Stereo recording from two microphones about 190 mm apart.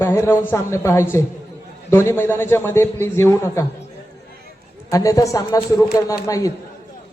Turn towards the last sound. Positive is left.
turn(degrees=20)  # may be behind; listen again after turning